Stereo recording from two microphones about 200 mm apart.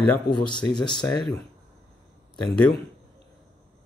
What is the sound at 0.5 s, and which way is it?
Speech, 20° left (ahead or behind).